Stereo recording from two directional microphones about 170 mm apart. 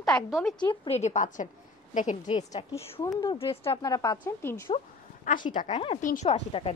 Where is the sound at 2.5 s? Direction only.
20° left (ahead or behind).